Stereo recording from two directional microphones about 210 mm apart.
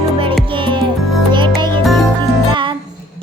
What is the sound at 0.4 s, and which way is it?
Music, 25° right (ahead or behind).